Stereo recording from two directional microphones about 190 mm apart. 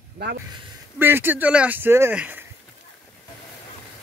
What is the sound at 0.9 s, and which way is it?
Speech, 10° right (ahead or behind).